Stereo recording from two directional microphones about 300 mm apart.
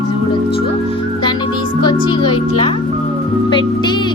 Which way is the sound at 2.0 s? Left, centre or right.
Centre.